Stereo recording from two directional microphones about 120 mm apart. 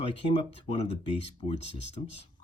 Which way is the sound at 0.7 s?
55° left (ahead or behind).